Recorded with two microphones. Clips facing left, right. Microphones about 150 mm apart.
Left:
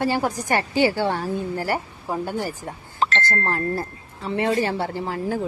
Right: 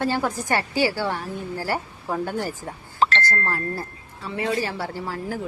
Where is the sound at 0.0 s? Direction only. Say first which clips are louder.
Left 1 dB; 15° left (ahead or behind); by 1.3 s 30° left (ahead or behind).